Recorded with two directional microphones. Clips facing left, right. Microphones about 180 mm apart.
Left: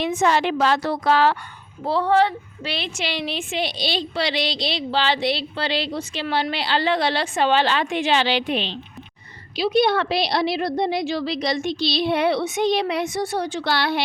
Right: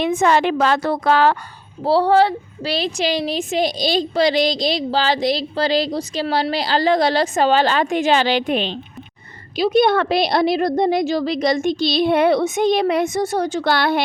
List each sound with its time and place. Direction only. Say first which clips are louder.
0.0 s a woman's voice: right 4 dB; 55° right (ahead or behind)
1.8 s a woman's voice: right 4 dB; 35° right (ahead or behind); by 14.0 s 50° right (ahead or behind)